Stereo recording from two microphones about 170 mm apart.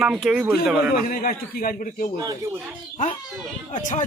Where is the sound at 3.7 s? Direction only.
45° left (ahead or behind).